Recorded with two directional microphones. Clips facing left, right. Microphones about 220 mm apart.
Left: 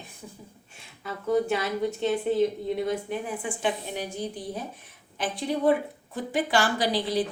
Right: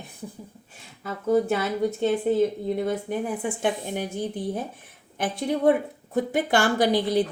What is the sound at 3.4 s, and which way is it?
Speech, 55° right (ahead or behind).